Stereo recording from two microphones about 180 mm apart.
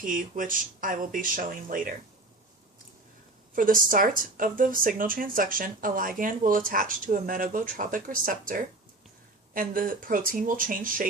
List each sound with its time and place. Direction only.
0.0 s speech: 50° right (ahead or behind)
3.5 s speech: 50° right (ahead or behind)